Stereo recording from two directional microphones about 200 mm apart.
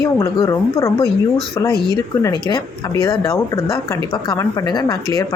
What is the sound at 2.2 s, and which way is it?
Speech, 20° left (ahead or behind).